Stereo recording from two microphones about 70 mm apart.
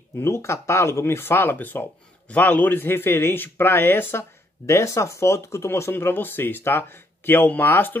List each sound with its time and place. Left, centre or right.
0.2 s speech: left